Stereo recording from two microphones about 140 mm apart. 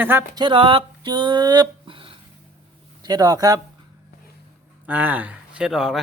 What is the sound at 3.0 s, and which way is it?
Speech, 25° right (ahead or behind).